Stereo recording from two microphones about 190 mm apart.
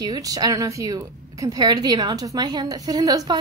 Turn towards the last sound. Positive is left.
turn(degrees=-20)  # may be behind; listen again after turning